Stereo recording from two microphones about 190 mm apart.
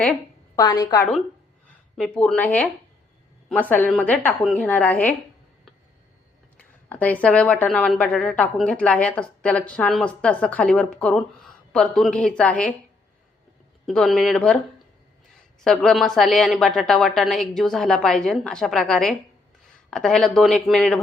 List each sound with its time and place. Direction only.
0.5 s a woman's voice: 20° left (ahead or behind)
2.0 s a woman's voice: 5° left (ahead or behind)
6.8 s a woman's voice: 10° left (ahead or behind)
13.8 s a woman's voice: centre (ahead or behind)
15.6 s a woman's voice: centre (ahead or behind)